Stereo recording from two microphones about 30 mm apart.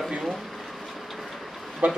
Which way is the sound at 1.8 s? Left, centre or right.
Right.